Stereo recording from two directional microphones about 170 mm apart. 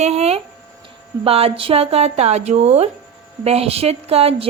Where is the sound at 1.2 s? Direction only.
35° right (ahead or behind).